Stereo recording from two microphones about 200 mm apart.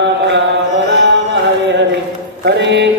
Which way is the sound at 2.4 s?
60° right (ahead or behind).